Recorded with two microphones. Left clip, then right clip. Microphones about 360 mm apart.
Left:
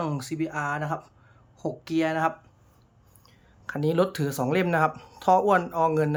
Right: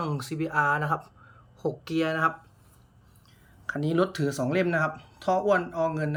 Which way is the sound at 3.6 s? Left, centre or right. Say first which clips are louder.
Left 2 dB; centre.